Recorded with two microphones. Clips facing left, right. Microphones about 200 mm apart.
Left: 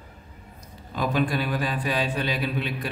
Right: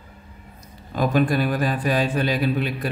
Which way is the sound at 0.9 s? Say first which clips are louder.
Right 5 dB; 45° right (ahead or behind).